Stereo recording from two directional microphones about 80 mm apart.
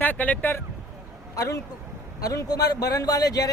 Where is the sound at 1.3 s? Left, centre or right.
Left.